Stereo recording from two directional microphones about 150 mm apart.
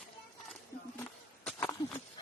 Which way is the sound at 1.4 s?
5° left (ahead or behind).